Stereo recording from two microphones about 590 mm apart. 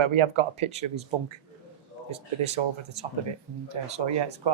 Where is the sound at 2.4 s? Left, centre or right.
Right.